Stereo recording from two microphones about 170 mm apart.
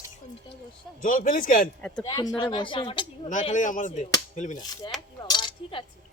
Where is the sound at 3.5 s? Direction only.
50° left (ahead or behind).